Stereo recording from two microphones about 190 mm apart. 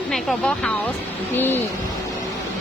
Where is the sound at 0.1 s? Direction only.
5° left (ahead or behind).